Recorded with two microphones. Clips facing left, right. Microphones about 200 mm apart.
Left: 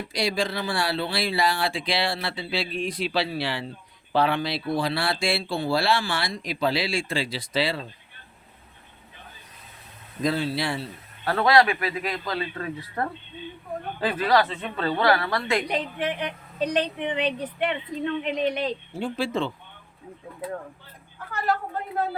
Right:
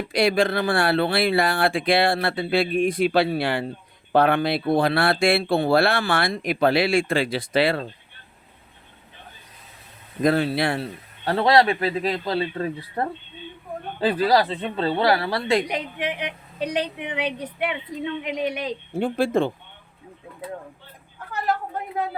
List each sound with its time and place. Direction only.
0.1 s speech: 60° right (ahead or behind)
10.2 s speech: 55° right (ahead or behind)
11.3 s speech: 30° right (ahead or behind)
15.7 s a woman's voice: 15° right (ahead or behind)
18.9 s speech: 55° right (ahead or behind)